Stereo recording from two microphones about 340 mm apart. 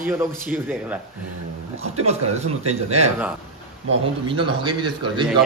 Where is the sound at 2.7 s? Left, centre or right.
Centre.